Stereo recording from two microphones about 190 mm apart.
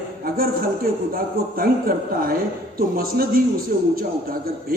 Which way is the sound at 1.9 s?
50° right (ahead or behind).